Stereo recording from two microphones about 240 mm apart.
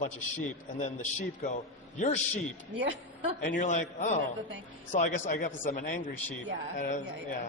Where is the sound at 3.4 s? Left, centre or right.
Left.